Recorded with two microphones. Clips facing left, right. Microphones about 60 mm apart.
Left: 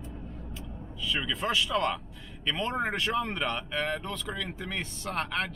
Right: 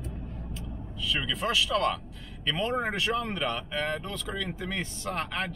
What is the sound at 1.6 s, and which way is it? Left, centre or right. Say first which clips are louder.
A man's voice: right 1 dB; centre.